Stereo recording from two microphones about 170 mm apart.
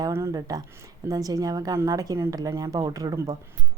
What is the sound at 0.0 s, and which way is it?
Speech, 20° right (ahead or behind).